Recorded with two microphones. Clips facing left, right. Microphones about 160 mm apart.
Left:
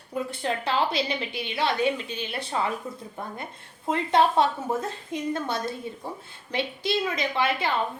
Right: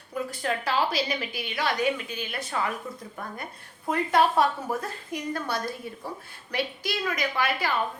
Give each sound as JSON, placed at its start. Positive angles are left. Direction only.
{"t": 0.1, "sound": "a woman's voice", "side_deg": 25}
{"t": 3.8, "sound": "a woman's voice", "side_deg": 25}